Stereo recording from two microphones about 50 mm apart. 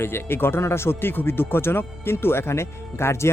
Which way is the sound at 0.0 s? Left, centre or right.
Left.